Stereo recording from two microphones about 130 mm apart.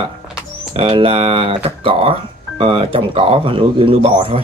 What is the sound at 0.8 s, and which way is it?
Speech, 45° right (ahead or behind).